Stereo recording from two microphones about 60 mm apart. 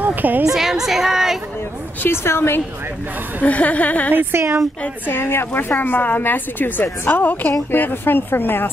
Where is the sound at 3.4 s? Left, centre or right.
Left.